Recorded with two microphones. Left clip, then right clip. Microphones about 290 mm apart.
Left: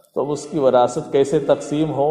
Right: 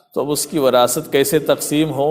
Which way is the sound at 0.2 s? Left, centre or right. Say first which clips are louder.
Right 2 dB; right.